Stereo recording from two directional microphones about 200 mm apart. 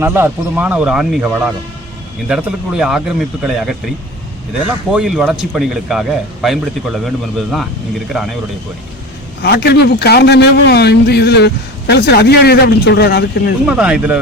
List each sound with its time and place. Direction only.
0.0 s speech: 10° right (ahead or behind)
4.9 s speech: 5° right (ahead or behind)
9.4 s a man's voice: 55° left (ahead or behind)
13.7 s speech: 5° right (ahead or behind)